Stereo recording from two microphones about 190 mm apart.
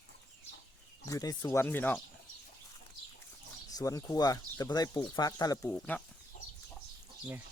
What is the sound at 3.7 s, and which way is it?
Speech, 20° left (ahead or behind).